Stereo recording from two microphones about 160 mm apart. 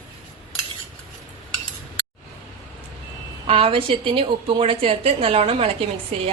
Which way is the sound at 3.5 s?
35° right (ahead or behind).